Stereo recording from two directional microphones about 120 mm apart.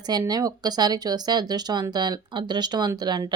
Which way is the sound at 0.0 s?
35° right (ahead or behind).